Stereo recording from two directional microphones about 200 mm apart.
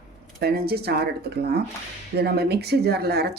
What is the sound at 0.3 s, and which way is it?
Speech, 50° right (ahead or behind).